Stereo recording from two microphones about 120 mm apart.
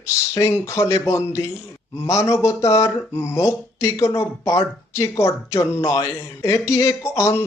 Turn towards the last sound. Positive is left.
turn(degrees=25)  # may be behind; listen again after turning